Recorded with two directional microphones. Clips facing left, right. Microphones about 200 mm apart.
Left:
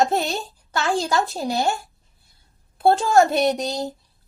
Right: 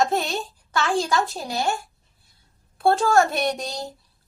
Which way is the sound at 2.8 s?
20° left (ahead or behind).